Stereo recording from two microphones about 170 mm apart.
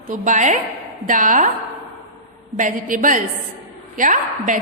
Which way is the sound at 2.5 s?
50° right (ahead or behind).